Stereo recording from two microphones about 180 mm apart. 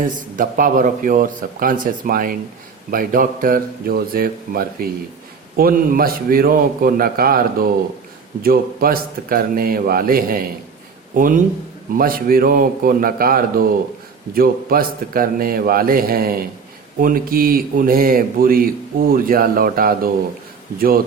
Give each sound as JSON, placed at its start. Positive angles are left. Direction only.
{"t": 0.0, "sound": "speech", "side_deg": -50}